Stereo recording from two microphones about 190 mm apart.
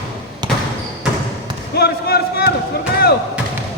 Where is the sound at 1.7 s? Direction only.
55° left (ahead or behind).